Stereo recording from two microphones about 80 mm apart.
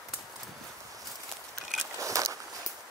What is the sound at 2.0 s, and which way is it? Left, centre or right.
Walk, right.